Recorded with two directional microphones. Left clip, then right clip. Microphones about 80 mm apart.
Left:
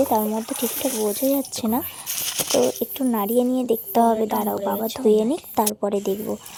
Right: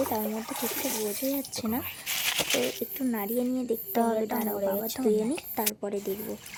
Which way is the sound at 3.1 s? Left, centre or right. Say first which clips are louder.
Left 10 dB; left.